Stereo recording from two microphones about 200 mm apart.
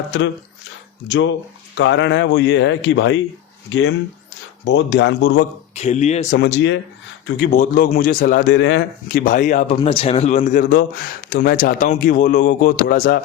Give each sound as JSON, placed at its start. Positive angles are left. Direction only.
{"t": 1.0, "sound": "speech", "side_deg": 65}
{"t": 5.7, "sound": "speech", "side_deg": 35}
{"t": 6.4, "sound": "speech", "side_deg": 65}
{"t": 7.3, "sound": "speech", "side_deg": 40}
{"t": 9.0, "sound": "speech", "side_deg": 45}
{"t": 9.7, "sound": "speech", "side_deg": 25}